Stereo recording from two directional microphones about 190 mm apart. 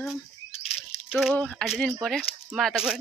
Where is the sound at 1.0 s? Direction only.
5° right (ahead or behind).